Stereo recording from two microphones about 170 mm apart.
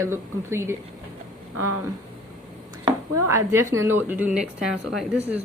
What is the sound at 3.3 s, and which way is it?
Speech, 15° right (ahead or behind).